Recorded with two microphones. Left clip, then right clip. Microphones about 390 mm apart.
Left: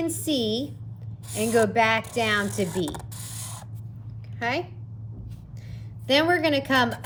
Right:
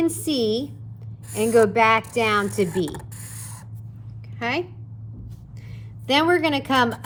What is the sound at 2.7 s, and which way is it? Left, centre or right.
Mechanisms, centre.